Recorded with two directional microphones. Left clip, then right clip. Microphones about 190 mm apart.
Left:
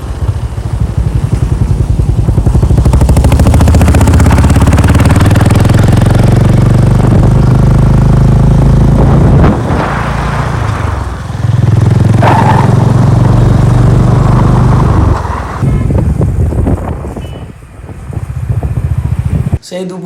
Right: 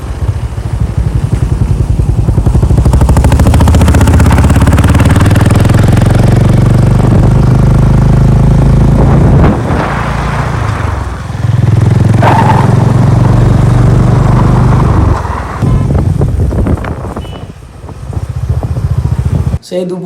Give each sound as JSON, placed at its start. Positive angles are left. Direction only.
{"t": 2.4, "sound": "vehicle", "side_deg": 0}
{"t": 3.5, "sound": "vehicle", "side_deg": -15}
{"t": 11.6, "sound": "vehicle", "side_deg": 10}
{"t": 12.6, "sound": "vehicle", "side_deg": -15}